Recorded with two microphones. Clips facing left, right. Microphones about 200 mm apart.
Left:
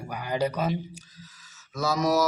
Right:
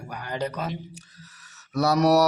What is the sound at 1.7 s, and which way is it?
Mantra, 65° right (ahead or behind).